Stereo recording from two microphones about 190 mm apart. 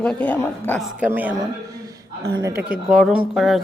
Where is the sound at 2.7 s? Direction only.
Centre (ahead or behind).